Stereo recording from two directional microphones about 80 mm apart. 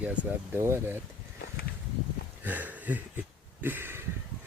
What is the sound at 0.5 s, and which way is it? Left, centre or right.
Speech, right.